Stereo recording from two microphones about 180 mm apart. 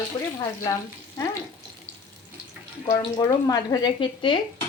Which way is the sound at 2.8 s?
20° left (ahead or behind).